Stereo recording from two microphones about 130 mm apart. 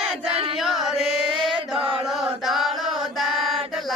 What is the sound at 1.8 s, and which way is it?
Chant, 45° right (ahead or behind).